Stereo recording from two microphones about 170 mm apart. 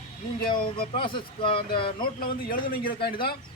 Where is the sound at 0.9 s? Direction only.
30° left (ahead or behind).